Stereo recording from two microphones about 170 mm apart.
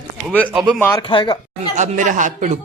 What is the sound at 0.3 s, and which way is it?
Speech, 5° right (ahead or behind).